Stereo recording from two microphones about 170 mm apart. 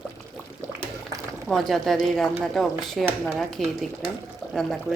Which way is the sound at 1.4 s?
Centre (ahead or behind).